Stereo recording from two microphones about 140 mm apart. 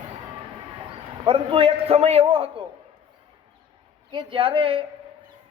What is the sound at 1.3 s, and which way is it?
A man's voice, 40° right (ahead or behind).